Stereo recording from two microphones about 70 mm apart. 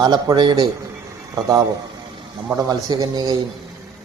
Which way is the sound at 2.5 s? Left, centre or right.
Right.